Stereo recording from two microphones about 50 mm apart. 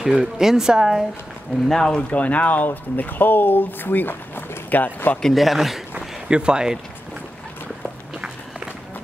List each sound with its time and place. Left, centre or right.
0.0 s speech: centre
1.7 s speech: centre
2.0 s speech: left
5.3 s speech: centre
5.9 s a sound: centre